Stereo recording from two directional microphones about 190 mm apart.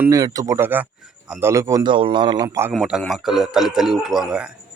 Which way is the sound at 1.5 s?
15° right (ahead or behind).